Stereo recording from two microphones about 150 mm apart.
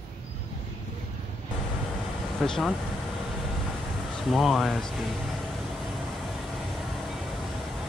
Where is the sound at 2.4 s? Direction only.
5° left (ahead or behind).